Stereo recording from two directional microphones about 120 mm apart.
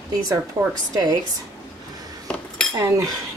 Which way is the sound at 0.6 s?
30° right (ahead or behind).